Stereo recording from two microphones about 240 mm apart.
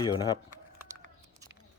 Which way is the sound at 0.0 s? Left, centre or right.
Centre.